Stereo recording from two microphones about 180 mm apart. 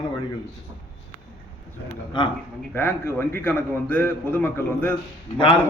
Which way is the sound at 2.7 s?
10° left (ahead or behind).